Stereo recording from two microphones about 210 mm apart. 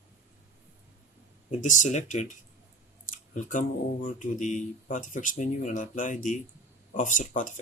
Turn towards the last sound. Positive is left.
turn(degrees=35)  # may be behind; listen again after turning